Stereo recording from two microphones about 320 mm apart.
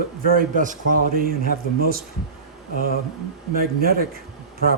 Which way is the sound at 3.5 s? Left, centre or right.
Right.